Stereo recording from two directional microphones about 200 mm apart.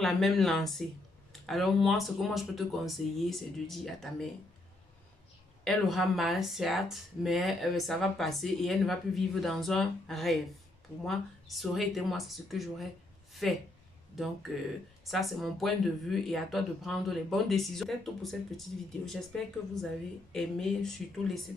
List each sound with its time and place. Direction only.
0.0 s speech: centre (ahead or behind)
5.6 s speech: centre (ahead or behind)
13.3 s a sound: centre (ahead or behind)
14.1 s speech: centre (ahead or behind)